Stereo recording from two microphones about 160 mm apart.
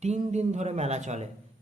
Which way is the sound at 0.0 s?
45° right (ahead or behind).